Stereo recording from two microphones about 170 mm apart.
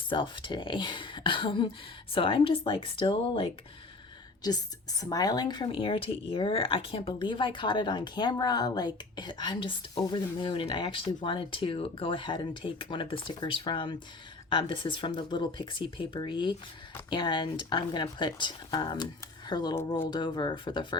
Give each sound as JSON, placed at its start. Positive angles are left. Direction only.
{"t": 0.1, "sound": "speech", "side_deg": 30}